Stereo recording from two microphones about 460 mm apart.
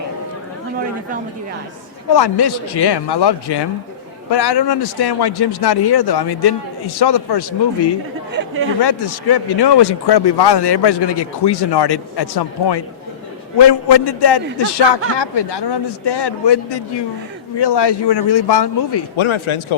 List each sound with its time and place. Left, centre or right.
2.1 s a man's voice: left
8.8 s speech: left